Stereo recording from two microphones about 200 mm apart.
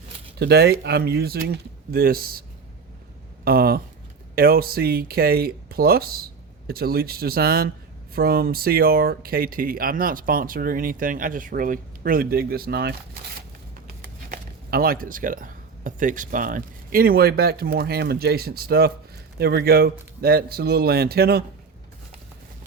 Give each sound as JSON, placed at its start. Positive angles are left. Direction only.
{"t": 0.3, "sound": "speech", "side_deg": -55}
{"t": 3.4, "sound": "speech", "side_deg": -50}
{"t": 14.3, "sound": "speech", "side_deg": -45}